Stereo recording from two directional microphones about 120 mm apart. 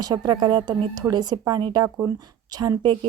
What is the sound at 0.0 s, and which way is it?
Speech, 35° right (ahead or behind).